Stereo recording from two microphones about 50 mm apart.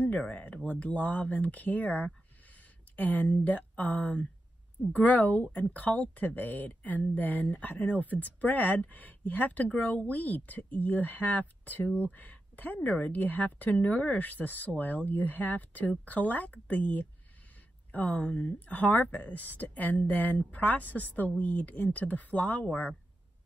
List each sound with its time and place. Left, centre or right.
0.2 s speech: left
18.2 s speech: left
18.7 s speech: left